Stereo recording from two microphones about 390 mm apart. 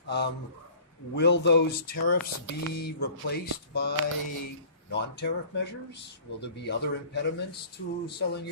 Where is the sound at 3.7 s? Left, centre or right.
Left.